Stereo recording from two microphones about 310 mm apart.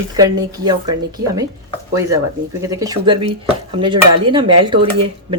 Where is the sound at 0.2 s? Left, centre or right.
Centre.